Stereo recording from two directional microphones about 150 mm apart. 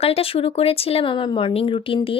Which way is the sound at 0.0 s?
40° left (ahead or behind).